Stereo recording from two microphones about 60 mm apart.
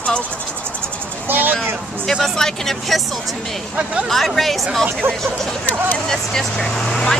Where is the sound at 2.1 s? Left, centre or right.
Centre.